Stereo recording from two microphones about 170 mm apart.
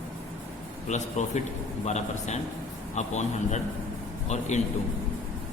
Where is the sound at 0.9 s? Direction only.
45° left (ahead or behind).